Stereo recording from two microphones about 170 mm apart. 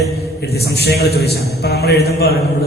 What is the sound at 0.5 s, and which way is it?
A man's voice, 75° left (ahead or behind).